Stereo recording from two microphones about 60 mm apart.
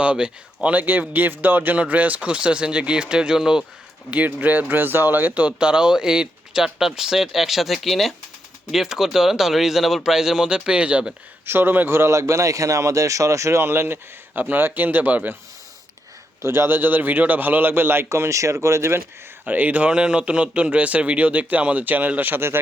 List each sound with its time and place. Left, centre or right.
0.0 s speech: centre
4.1 s speech: right
11.4 s a man's voice: right
13.6 s a man's voice: right
16.4 s a man's voice: right
19.5 s speech: right